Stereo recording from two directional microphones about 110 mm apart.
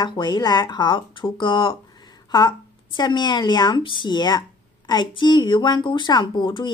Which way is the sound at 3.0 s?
40° left (ahead or behind).